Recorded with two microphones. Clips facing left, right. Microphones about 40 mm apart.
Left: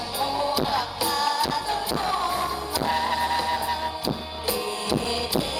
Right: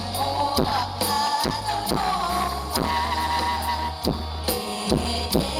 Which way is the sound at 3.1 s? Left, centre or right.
Centre.